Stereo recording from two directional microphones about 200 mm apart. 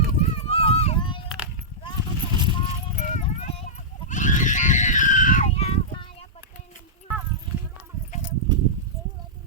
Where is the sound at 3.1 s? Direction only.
30° left (ahead or behind).